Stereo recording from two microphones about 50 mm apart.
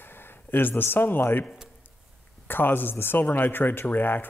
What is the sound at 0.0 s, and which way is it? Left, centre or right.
Speech, left.